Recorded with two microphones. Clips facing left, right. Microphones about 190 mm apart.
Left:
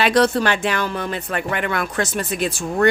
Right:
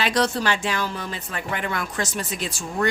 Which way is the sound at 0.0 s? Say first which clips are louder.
Left 6 dB; 55° left (ahead or behind).